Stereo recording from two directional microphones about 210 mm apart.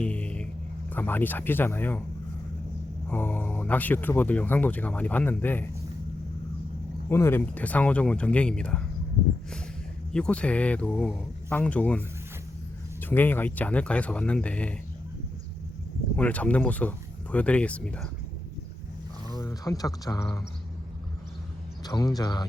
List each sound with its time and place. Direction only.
0.0 s a sound: 5° left (ahead or behind)
0.9 s speech: 10° left (ahead or behind)
3.1 s speech: 10° left (ahead or behind)
7.1 s speech: 10° left (ahead or behind)
10.1 s speech: 5° left (ahead or behind)
16.1 s speech: 5° left (ahead or behind)
19.3 s speech: 15° left (ahead or behind)
21.8 s speech: 20° left (ahead or behind)